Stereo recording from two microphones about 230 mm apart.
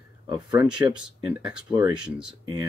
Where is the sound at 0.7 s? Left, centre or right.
Centre.